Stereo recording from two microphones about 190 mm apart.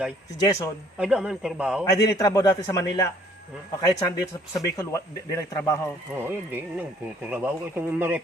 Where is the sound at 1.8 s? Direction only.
20° left (ahead or behind).